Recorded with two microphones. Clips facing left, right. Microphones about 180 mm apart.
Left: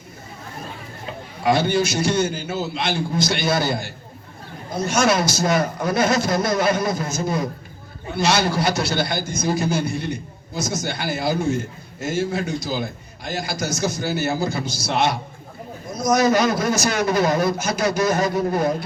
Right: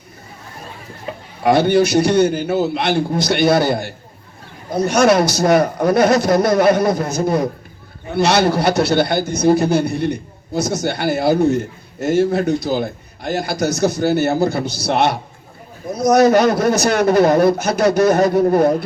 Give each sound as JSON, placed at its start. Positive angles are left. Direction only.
{"t": 1.5, "sound": "a woman's voice", "side_deg": -55}